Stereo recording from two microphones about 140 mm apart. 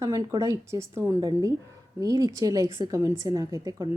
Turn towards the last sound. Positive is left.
turn(degrees=-25)  # may be behind; listen again after turning